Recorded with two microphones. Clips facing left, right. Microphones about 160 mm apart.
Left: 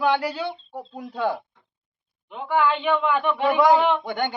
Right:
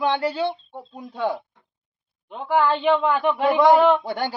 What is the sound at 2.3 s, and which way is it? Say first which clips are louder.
A man's voice: right 1 dB; 40° right (ahead or behind).